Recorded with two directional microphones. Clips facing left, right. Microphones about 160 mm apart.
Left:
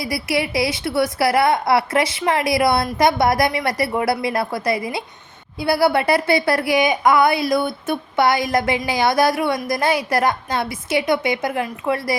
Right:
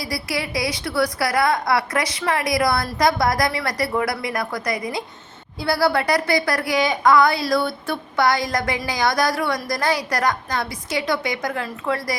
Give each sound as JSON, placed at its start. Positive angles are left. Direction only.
{"t": 0.0, "sound": "a woman's voice", "side_deg": 25}